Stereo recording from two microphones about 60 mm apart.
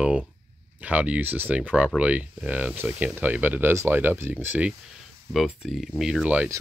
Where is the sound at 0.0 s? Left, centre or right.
Centre.